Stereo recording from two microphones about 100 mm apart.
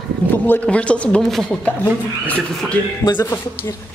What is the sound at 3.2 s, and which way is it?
Speech, 25° left (ahead or behind).